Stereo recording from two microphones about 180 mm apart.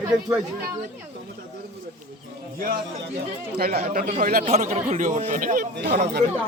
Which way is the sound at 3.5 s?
55° right (ahead or behind).